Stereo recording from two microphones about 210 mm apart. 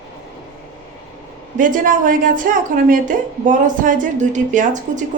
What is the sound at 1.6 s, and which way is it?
A woman's voice, 40° right (ahead or behind).